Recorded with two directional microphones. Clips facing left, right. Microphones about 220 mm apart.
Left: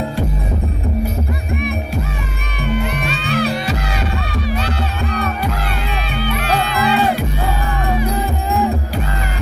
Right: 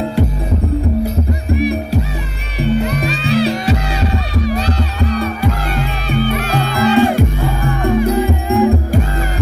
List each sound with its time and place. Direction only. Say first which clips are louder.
1.6 s music: right 6 dB; 35° right (ahead or behind)
6.0 s music: right 4 dB; 45° right (ahead or behind)